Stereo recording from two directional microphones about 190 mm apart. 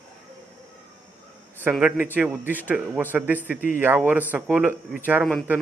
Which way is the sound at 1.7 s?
5° right (ahead or behind).